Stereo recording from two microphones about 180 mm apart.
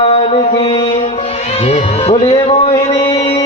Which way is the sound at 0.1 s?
30° left (ahead or behind).